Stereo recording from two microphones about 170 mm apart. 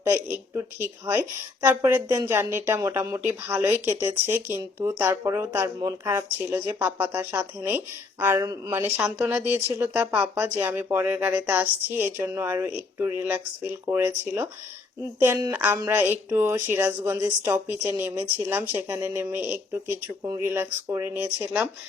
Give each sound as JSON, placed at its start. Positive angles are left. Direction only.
{"t": 0.0, "sound": "speech", "side_deg": -10}
{"t": 1.6, "sound": "a woman's voice", "side_deg": -15}
{"t": 9.0, "sound": "a woman's voice", "side_deg": -10}